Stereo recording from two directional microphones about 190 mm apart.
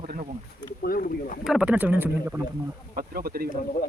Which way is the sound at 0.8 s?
50° left (ahead or behind).